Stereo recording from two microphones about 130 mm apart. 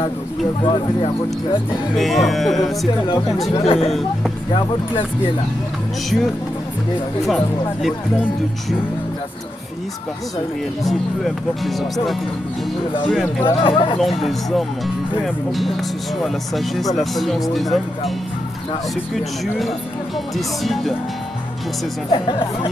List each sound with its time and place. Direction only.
0.6 s speech: 40° left (ahead or behind)
2.0 s speech: centre (ahead or behind)
3.6 s speech: 50° left (ahead or behind)
6.0 s speech: centre (ahead or behind)
10.8 s speech: centre (ahead or behind)
13.4 s speech: 45° left (ahead or behind)
13.9 s speech: centre (ahead or behind)
17.0 s speech: centre (ahead or behind)
19.1 s speech: centre (ahead or behind)
22.1 s speech: 40° left (ahead or behind)